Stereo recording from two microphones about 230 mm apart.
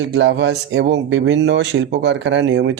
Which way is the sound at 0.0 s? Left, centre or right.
Right.